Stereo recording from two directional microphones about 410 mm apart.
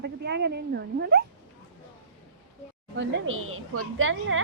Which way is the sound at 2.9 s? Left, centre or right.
Right.